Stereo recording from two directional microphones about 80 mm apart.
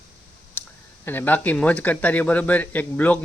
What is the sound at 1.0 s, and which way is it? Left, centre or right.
Speech, left.